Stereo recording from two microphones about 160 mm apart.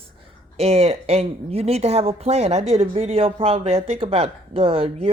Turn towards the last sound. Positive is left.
turn(degrees=-35)  # may be behind; listen again after turning